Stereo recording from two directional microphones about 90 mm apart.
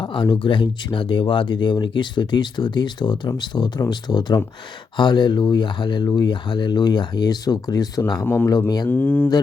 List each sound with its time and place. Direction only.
0.0 s speech: 60° left (ahead or behind)
8.2 s speech: 20° left (ahead or behind)